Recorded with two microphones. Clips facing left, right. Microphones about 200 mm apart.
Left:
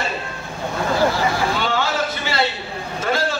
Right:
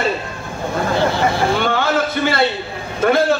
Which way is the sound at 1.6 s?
55° right (ahead or behind).